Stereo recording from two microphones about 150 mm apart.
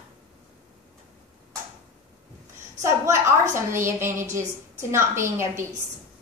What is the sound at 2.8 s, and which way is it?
A woman's voice, 20° right (ahead or behind).